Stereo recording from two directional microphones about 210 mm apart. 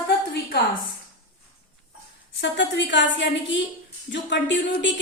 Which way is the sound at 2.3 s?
55° left (ahead or behind).